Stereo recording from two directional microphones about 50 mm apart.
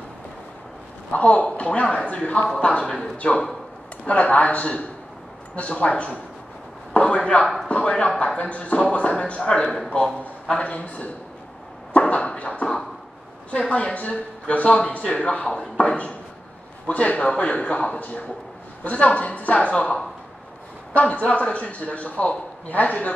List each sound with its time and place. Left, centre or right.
1.1 s a man's voice: left
2.8 s speech: centre
4.0 s a man's voice: left
6.9 s a sound: left
7.6 s a man's voice: left
9.4 s speech: centre
10.5 s a man's voice: left
11.9 s a sound: left
13.5 s a man's voice: left
15.4 s a man's voice: centre; by 23.1 s left